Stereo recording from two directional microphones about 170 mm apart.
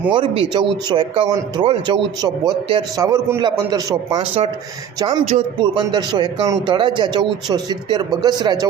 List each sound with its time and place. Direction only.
0.1 s a man's voice: 30° right (ahead or behind)